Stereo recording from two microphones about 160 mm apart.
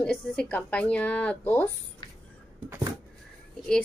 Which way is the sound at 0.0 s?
5° left (ahead or behind).